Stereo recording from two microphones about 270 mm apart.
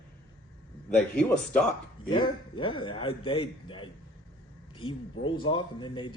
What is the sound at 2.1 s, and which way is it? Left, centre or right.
Speech, centre.